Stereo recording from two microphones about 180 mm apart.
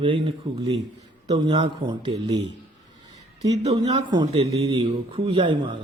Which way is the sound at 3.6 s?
25° right (ahead or behind).